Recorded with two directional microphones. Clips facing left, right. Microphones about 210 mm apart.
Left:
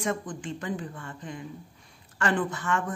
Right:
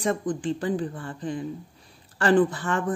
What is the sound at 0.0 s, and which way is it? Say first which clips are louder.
Speech: right 5 dB; 35° right (ahead or behind).